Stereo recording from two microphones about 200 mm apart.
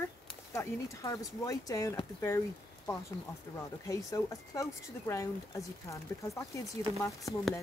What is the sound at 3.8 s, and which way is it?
Speech, 15° left (ahead or behind).